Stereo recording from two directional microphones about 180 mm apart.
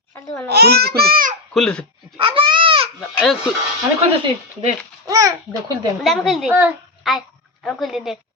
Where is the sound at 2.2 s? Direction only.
30° right (ahead or behind).